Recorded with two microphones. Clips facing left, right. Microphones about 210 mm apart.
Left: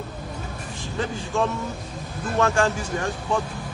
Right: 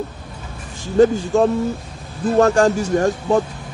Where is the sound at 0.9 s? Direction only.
40° right (ahead or behind).